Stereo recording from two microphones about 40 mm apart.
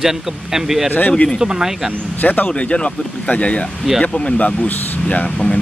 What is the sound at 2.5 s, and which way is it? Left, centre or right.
Speech, left.